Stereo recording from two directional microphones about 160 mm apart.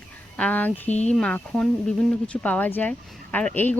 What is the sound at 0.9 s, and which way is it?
Speech, 45° left (ahead or behind).